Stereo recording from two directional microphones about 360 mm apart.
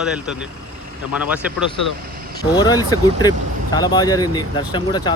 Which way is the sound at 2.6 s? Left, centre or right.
Centre.